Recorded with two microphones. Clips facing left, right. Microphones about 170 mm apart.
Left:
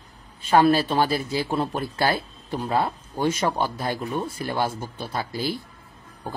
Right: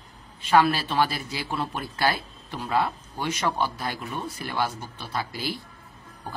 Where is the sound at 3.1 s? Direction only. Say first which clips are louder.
Left 4 dB; 50° left (ahead or behind).